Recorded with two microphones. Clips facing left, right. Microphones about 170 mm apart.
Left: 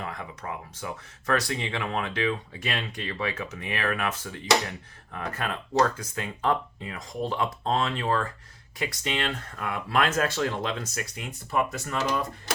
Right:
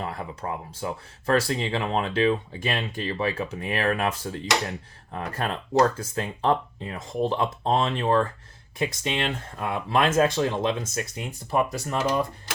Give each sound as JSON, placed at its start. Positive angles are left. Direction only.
{"t": 0.0, "sound": "speech", "side_deg": -35}